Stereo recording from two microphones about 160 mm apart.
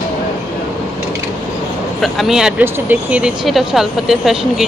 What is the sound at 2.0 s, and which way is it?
Speech, centre (ahead or behind).